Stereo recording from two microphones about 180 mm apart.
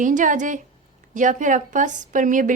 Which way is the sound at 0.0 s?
45° right (ahead or behind).